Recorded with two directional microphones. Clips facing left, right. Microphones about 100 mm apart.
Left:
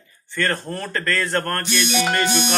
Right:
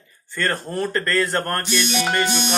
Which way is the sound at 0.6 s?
20° right (ahead or behind).